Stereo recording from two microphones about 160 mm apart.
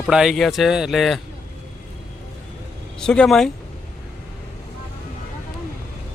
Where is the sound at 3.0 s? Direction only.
5° left (ahead or behind).